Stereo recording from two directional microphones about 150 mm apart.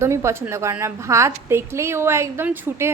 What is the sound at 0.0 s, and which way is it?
A woman's voice, 20° right (ahead or behind).